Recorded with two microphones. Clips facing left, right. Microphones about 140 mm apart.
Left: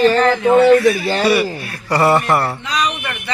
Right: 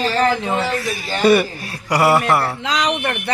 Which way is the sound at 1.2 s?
50° right (ahead or behind).